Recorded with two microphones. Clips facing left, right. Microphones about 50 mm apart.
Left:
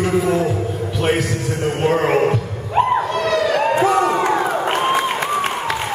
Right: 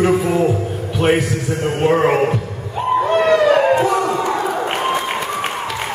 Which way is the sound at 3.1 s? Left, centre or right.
Right.